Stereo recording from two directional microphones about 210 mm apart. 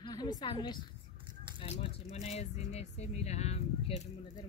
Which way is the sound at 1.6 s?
30° left (ahead or behind).